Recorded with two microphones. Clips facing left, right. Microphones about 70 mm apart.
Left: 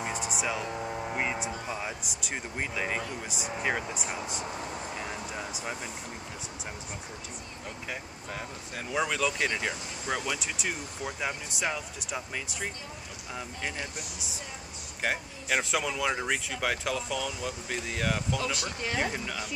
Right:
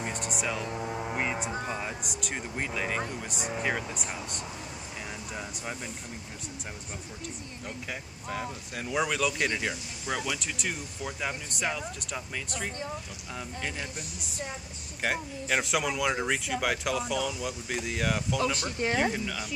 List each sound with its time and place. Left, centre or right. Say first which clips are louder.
0.0 s vehicle: left 1 dB; centre
1.7 s speech: right 1 dB; centre
5.3 s vehicle: left 1 dB; centre
7.9 s speech: right 3 dB; centre
15.0 s speech: right 1 dB; centre
18.4 s speech: right 4 dB; right
19.1 s speech: right 1 dB; centre